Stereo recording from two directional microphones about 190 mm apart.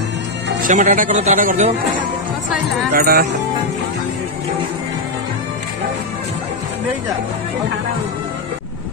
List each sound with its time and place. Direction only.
0.6 s speech: 40° right (ahead or behind)
2.9 s speech: 50° right (ahead or behind)